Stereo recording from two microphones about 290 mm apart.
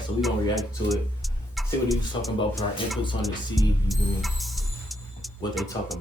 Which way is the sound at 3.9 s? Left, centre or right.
Centre.